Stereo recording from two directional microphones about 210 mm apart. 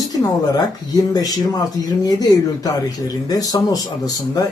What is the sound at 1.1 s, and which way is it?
Speech, 15° left (ahead or behind).